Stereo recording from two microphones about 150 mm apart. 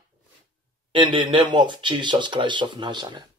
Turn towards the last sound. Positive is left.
turn(degrees=-30)  # may be behind; listen again after turning